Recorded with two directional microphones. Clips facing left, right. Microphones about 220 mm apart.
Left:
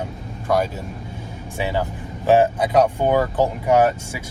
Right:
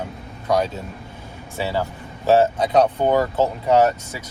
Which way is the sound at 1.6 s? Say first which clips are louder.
Even; 15° left (ahead or behind).